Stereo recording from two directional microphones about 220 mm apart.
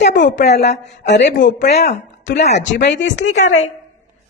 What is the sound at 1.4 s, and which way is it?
Speech, 35° left (ahead or behind).